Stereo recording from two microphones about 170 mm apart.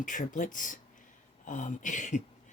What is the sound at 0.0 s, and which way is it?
Speech, 50° left (ahead or behind).